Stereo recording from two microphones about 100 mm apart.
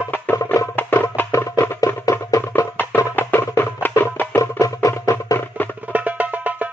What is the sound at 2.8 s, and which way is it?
Music, 20° left (ahead or behind).